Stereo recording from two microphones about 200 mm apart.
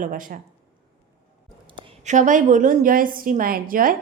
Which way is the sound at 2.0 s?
40° right (ahead or behind).